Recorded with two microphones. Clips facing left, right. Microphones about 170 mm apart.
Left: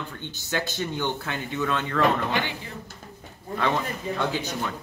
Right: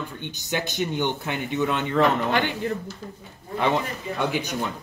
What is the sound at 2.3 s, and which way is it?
Speech, 55° right (ahead or behind).